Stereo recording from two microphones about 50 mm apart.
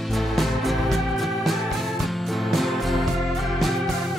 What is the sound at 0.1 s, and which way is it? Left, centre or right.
Music, centre.